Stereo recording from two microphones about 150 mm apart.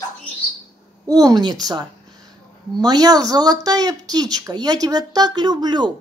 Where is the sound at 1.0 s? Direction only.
25° right (ahead or behind).